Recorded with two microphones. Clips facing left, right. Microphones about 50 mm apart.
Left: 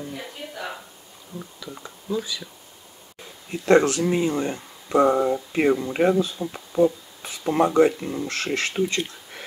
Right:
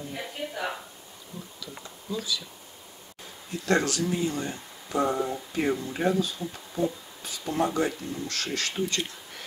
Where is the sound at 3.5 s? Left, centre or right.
Left.